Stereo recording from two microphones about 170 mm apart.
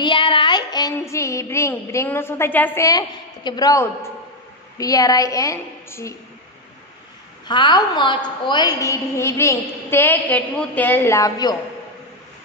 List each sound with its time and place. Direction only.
0.0 s music: 30° left (ahead or behind)
4.7 s a woman's voice: 20° left (ahead or behind)
7.4 s a woman's voice: 25° left (ahead or behind)